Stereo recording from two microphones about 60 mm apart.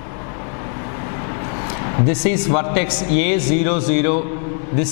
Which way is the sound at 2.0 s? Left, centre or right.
Centre.